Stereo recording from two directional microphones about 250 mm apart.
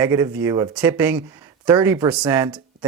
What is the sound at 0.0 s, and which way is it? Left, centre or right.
Speech, centre.